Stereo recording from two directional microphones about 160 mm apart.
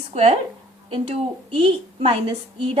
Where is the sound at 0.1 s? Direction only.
40° right (ahead or behind).